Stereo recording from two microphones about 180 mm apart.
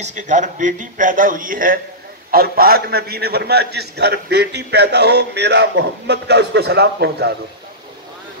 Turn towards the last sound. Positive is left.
turn(degrees=-65)  # may be behind; listen again after turning